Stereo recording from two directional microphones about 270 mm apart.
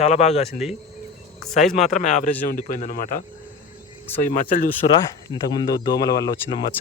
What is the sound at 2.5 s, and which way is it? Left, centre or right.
Speech, left.